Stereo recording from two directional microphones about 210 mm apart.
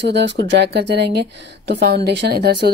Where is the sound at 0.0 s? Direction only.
55° right (ahead or behind).